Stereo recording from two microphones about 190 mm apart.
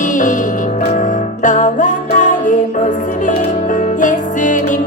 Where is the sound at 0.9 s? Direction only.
40° left (ahead or behind).